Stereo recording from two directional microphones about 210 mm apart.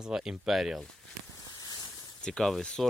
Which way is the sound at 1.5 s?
20° left (ahead or behind).